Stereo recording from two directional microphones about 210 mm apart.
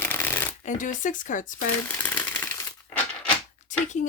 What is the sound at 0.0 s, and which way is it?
Shuffling cards, 10° left (ahead or behind).